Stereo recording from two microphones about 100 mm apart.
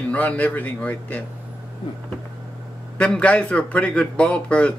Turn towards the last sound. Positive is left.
turn(degrees=10)  # may be behind; listen again after turning